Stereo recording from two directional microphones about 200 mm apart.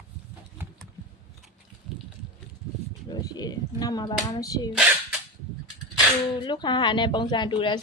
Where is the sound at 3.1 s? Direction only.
20° left (ahead or behind).